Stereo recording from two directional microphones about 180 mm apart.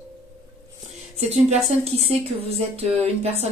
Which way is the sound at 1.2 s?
35° right (ahead or behind).